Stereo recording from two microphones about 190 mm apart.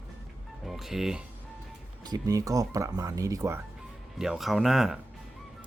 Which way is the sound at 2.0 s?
20° right (ahead or behind).